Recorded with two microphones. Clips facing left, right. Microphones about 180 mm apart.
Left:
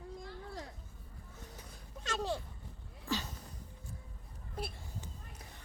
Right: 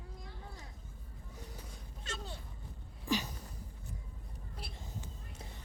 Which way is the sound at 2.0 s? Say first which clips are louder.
Left 9 dB; 90° left.